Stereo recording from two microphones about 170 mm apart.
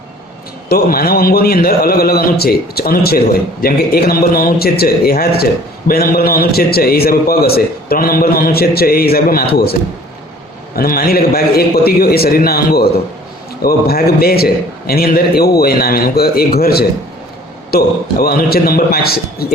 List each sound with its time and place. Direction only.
0.7 s a man's voice: 60° left (ahead or behind)
10.8 s a man's voice: 60° left (ahead or behind)